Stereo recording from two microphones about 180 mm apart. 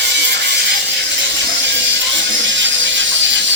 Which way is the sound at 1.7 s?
90° right.